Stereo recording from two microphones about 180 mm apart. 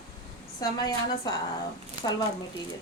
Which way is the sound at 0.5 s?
20° left (ahead or behind).